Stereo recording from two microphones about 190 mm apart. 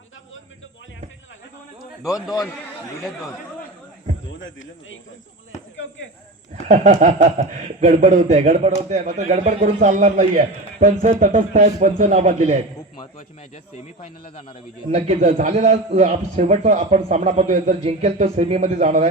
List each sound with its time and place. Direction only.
4.4 s a man's voice: 80° left
6.7 s speech: 40° right (ahead or behind)
14.8 s speech: 35° right (ahead or behind)